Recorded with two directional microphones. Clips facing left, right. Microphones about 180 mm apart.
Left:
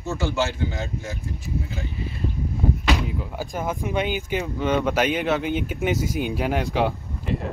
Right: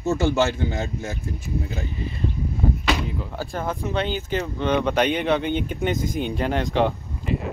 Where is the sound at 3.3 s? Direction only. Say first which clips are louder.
Right 1 dB; 15° left (ahead or behind).